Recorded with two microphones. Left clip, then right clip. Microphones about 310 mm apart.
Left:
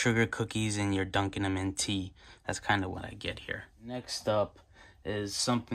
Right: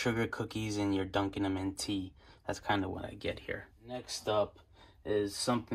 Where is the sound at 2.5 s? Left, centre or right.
Centre.